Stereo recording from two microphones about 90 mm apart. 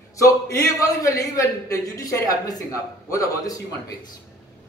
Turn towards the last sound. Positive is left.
turn(degrees=40)  # may be behind; listen again after turning